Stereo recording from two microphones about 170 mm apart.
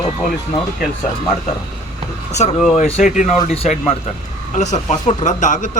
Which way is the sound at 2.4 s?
45° left (ahead or behind).